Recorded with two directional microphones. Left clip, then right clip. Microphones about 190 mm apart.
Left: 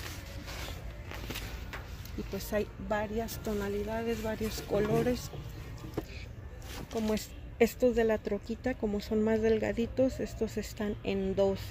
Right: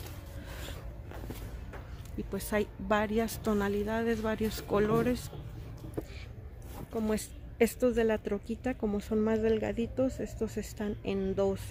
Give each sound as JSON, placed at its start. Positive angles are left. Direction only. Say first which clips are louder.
{"t": 2.5, "sound": "speech", "louder": "right 3 dB", "side_deg": -25}
{"t": 7.1, "sound": "speech", "louder": "even", "side_deg": -5}